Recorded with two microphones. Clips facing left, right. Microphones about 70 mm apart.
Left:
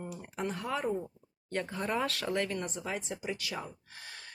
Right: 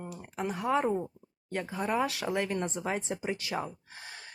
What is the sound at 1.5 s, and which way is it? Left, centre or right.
Speech, centre.